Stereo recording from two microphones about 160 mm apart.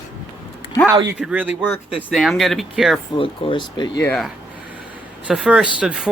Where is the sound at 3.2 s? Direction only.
35° left (ahead or behind).